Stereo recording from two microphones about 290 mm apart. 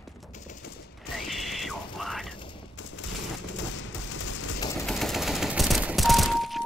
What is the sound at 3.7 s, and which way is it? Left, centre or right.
Fusillade, left.